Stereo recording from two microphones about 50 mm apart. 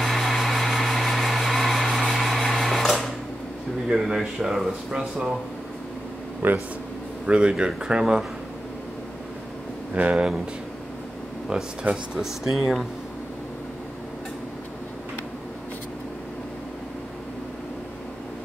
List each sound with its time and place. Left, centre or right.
0.0 s vehicle: centre
3.9 s speech: centre
4.9 s speech: centre
6.4 s speech: right
7.2 s speech: centre
9.9 s speech: right
11.9 s speech: right
12.2 s speech: centre